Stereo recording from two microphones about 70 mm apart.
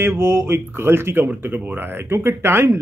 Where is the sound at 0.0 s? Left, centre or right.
Right.